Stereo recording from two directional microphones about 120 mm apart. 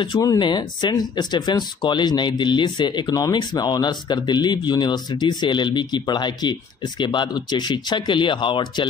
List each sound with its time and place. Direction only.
0.2 s speech: 35° left (ahead or behind)